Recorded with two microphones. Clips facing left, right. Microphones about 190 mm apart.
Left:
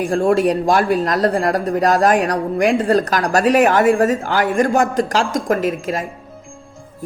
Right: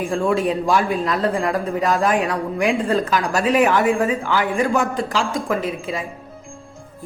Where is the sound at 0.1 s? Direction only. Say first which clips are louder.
Left 5 dB; 40° left (ahead or behind).